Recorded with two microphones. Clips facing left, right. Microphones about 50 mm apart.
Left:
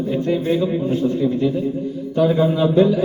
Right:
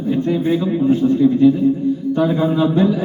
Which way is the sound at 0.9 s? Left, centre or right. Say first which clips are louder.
Right 5 dB; right.